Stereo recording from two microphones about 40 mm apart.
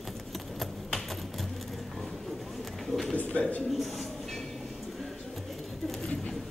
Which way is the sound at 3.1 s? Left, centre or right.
Left.